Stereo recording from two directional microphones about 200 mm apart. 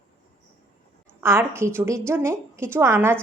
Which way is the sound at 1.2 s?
10° right (ahead or behind).